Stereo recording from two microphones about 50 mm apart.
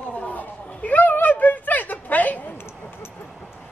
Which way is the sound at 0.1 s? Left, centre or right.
Left.